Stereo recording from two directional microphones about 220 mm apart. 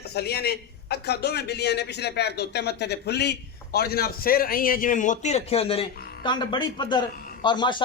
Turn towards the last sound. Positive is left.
turn(degrees=20)  # may be behind; listen again after turning